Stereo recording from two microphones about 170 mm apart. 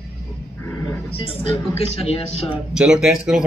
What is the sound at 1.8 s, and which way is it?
Speech, 35° left (ahead or behind).